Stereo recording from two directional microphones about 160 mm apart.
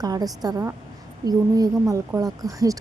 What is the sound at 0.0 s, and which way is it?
Speech, 25° right (ahead or behind).